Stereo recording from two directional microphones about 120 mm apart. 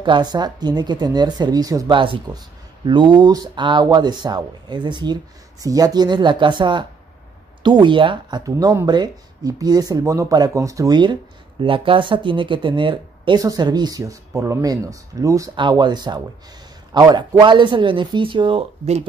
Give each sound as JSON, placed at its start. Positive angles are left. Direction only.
{"t": 0.0, "sound": "speech", "side_deg": -40}
{"t": 1.9, "sound": "speech", "side_deg": -45}
{"t": 11.6, "sound": "speech", "side_deg": -45}
{"t": 13.4, "sound": "speech", "side_deg": -30}
{"t": 15.5, "sound": "speech", "side_deg": -40}